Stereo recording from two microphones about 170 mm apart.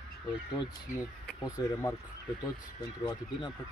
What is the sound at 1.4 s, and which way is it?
Speech, 15° left (ahead or behind).